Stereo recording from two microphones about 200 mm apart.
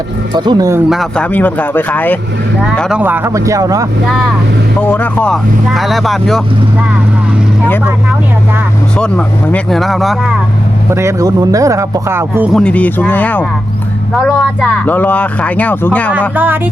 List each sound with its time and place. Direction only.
0.3 s speech: 20° right (ahead or behind)
0.9 s speech: centre (ahead or behind)
3.0 s speech: 10° right (ahead or behind)
4.8 s speech: 10° left (ahead or behind)
9.0 s speech: 5° left (ahead or behind)
10.9 s speech: 15° right (ahead or behind)
12.5 s speech: 5° left (ahead or behind)
16.3 s speech: 10° right (ahead or behind)